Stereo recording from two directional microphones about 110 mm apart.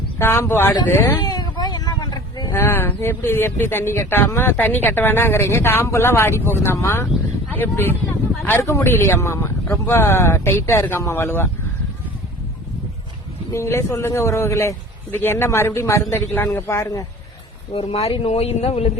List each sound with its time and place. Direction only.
0.2 s speech: 25° left (ahead or behind)
1.2 s a sound: 35° left (ahead or behind)
2.5 s speech: 25° left (ahead or behind)
13.5 s speech: 25° left (ahead or behind)
17.7 s speech: 70° left (ahead or behind)